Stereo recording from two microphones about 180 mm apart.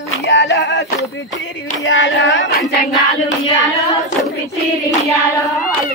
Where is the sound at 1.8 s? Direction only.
90° left.